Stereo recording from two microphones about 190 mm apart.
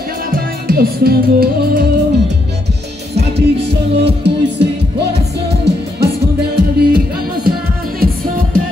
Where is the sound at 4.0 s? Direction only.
60° right (ahead or behind).